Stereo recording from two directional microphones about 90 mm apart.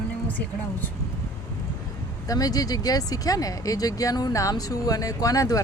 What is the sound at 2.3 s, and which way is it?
Speech, 40° left (ahead or behind).